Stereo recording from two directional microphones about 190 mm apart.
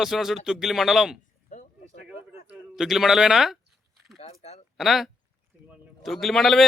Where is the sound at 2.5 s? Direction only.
Centre (ahead or behind).